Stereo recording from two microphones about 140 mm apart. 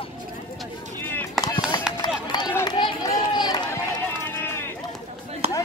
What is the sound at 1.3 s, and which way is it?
Chop, 25° left (ahead or behind).